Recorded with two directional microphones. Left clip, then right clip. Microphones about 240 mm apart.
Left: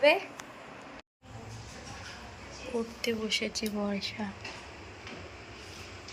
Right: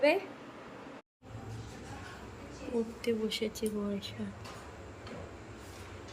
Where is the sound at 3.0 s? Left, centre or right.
Centre.